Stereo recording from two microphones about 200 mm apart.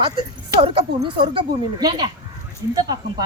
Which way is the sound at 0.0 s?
25° right (ahead or behind).